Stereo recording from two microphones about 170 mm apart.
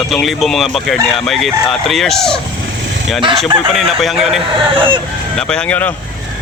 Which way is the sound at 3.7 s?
Centre (ahead or behind).